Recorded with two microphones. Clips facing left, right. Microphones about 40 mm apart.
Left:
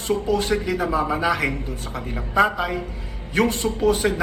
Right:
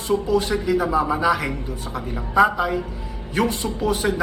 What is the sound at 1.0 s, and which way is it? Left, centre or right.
Speech, left.